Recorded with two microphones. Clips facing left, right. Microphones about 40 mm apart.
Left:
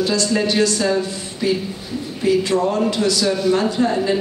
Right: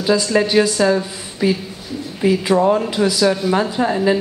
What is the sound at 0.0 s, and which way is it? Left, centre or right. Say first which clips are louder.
A woman's voice: right 2 dB; centre.